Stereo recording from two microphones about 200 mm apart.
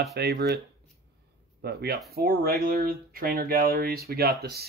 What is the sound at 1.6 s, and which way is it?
Speech, 55° right (ahead or behind).